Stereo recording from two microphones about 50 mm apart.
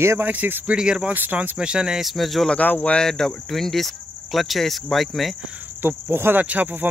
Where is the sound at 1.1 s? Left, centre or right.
Right.